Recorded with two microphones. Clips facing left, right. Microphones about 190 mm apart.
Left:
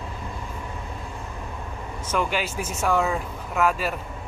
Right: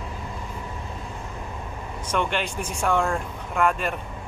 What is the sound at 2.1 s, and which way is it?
Speech, 5° left (ahead or behind).